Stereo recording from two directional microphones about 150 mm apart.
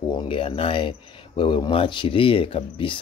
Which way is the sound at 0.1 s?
35° left (ahead or behind).